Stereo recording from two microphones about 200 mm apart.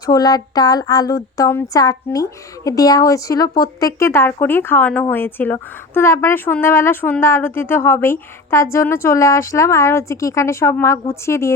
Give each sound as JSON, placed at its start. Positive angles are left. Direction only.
{"t": 0.0, "sound": "a woman's voice", "side_deg": 20}